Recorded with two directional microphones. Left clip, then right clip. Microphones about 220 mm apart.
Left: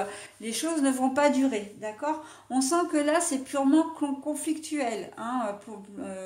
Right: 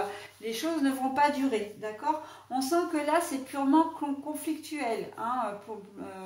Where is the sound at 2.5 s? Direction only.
45° left (ahead or behind).